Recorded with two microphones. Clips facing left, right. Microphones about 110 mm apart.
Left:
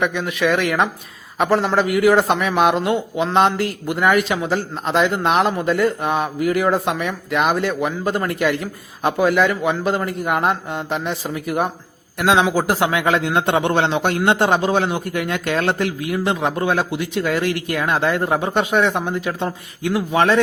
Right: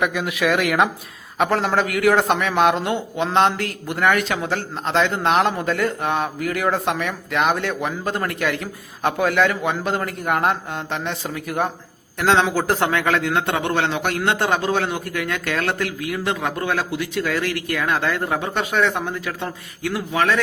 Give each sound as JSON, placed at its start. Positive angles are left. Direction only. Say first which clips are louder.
{"t": 0.0, "sound": "a man's voice", "louder": "left 1 dB", "side_deg": -5}